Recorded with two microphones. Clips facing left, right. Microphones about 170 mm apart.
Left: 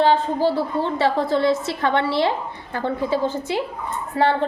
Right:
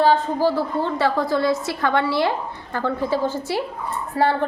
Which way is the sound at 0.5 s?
25° left (ahead or behind).